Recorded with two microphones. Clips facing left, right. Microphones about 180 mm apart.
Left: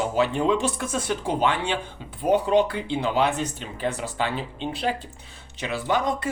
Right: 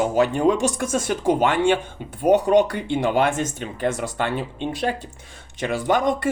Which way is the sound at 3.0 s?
50° right (ahead or behind).